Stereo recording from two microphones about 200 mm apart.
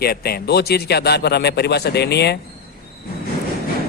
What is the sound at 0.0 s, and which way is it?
A man's voice, 50° left (ahead or behind).